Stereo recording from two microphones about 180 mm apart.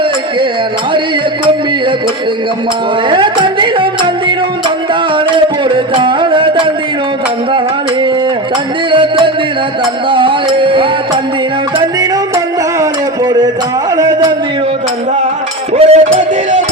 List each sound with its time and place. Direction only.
3.1 s music: 25° right (ahead or behind)
8.9 s music: 25° right (ahead or behind)
10.1 s a sound: 30° right (ahead or behind)
12.8 s a sound: 20° right (ahead or behind)
13.9 s music: 20° right (ahead or behind)
15.7 s music: 40° right (ahead or behind)